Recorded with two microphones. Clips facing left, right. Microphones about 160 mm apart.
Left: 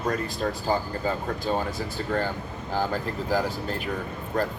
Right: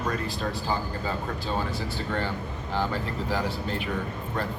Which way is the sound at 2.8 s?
40° left (ahead or behind).